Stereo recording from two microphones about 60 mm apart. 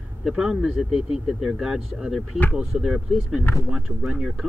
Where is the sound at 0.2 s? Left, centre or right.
Centre.